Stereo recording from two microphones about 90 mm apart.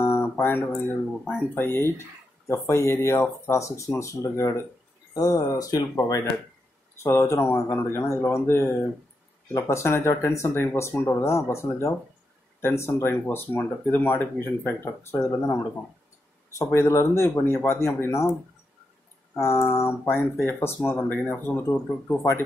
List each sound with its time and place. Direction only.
0.0 s guitar: 25° left (ahead or behind)
2.4 s speech: 30° left (ahead or behind)
7.0 s speech: 30° left (ahead or behind)
19.3 s speech: 30° left (ahead or behind)